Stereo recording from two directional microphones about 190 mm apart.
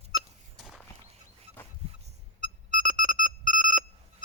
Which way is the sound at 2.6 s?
40° right (ahead or behind).